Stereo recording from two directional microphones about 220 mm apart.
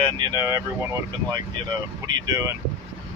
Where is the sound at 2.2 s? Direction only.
15° right (ahead or behind).